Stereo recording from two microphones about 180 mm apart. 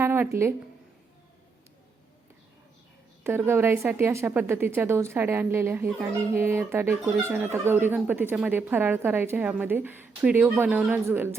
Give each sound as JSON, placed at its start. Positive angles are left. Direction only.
{"t": 0.0, "sound": "speech", "side_deg": -15}
{"t": 3.2, "sound": "speech", "side_deg": -15}